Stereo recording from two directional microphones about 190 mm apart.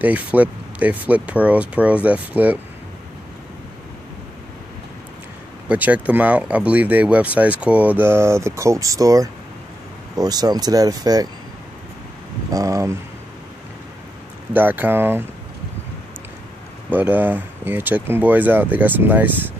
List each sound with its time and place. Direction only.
0.0 s speech: 10° right (ahead or behind)
5.7 s speech: 10° right (ahead or behind)
12.4 s speech: 15° right (ahead or behind)
14.5 s speech: 10° right (ahead or behind)
16.9 s speech: 10° right (ahead or behind)